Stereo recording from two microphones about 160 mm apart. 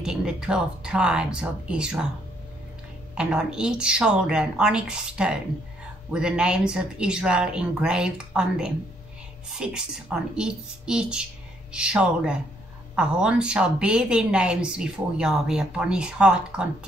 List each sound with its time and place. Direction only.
0.0 s speech: 5° right (ahead or behind)
3.2 s speech: 5° right (ahead or behind)